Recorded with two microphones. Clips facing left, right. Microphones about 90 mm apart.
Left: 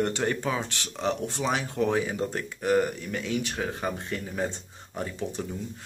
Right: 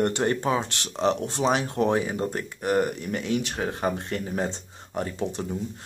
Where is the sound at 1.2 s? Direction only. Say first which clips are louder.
Right 4 dB; 25° right (ahead or behind).